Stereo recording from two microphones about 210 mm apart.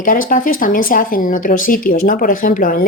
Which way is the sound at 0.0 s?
40° left (ahead or behind).